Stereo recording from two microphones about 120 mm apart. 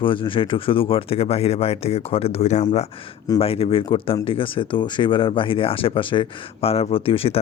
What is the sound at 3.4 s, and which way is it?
Speech, 55° left (ahead or behind).